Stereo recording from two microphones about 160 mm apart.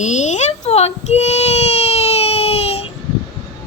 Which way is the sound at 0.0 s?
50° left (ahead or behind).